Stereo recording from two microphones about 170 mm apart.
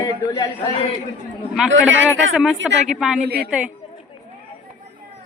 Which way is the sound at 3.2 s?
65° right (ahead or behind).